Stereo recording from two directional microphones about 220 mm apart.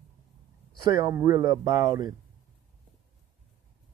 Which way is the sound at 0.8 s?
15° right (ahead or behind).